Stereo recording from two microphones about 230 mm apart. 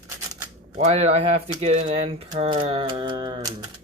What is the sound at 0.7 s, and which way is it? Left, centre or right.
Speech, right.